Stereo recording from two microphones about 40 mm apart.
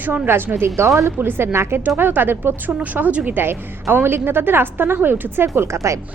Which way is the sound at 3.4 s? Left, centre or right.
Right.